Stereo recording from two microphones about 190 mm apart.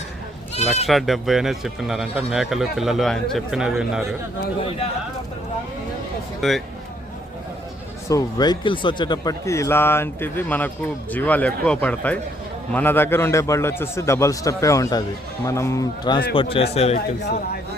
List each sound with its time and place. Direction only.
0.5 s speech: 35° left (ahead or behind)
0.9 s speech: centre (ahead or behind)
6.4 s speech: centre (ahead or behind)
8.0 s a man's voice: 20° left (ahead or behind)